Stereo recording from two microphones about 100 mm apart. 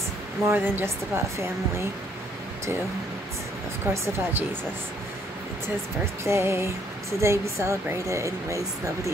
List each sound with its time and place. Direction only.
0.5 s speech: 25° right (ahead or behind)
3.8 s speech: 25° right (ahead or behind)
6.2 s speech: 25° right (ahead or behind)